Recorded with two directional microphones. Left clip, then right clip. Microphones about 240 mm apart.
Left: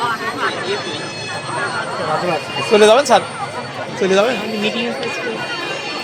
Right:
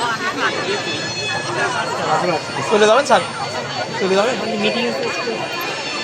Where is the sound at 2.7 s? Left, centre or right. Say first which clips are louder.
Left 3 dB; left.